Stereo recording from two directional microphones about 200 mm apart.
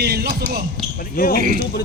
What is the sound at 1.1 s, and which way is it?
Speech, 45° left (ahead or behind).